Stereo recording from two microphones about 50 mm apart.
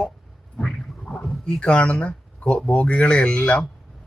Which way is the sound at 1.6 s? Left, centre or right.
Left.